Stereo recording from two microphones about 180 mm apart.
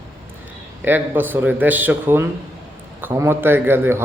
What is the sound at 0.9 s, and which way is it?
Speech, 10° right (ahead or behind).